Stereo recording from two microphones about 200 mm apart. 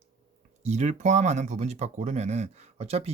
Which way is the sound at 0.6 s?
35° right (ahead or behind).